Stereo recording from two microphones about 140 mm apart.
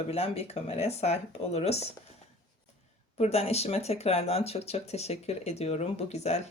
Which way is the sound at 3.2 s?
50° left (ahead or behind).